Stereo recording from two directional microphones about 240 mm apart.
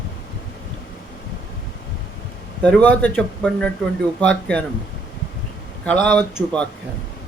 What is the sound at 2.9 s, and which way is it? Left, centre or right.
Speech, centre.